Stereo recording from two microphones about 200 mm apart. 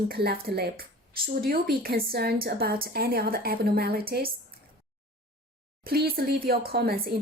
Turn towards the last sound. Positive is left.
turn(degrees=-50)  # may be behind; listen again after turning